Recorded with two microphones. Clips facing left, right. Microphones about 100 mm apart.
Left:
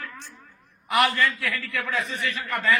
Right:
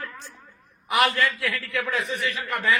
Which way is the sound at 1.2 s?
10° right (ahead or behind).